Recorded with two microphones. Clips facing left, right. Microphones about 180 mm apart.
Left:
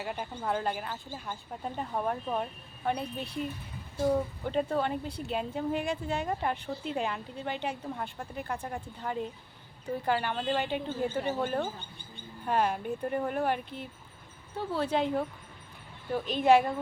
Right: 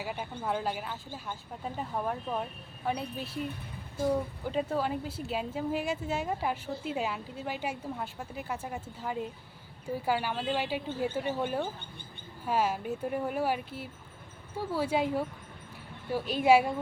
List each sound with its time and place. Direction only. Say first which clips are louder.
0.0 s a woman's voice: left 1 dB; 5° right (ahead or behind)
4.4 s a woman's voice: even; 5° right (ahead or behind)